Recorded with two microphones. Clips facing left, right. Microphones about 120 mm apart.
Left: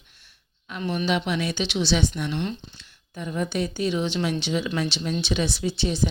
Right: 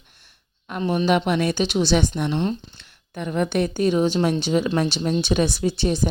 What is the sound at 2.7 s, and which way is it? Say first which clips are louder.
Speech: right 5 dB; 60° right (ahead or behind).